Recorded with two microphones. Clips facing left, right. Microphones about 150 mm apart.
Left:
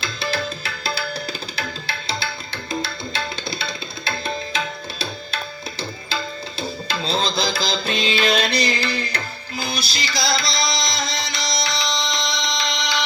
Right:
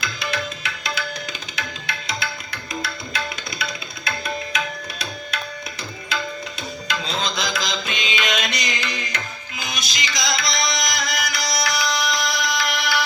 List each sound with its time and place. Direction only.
0.0 s tabla: 30° left (ahead or behind)
3.6 s tabla: 25° left (ahead or behind)